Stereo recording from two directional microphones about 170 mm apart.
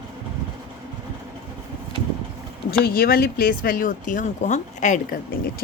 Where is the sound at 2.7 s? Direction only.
65° left (ahead or behind).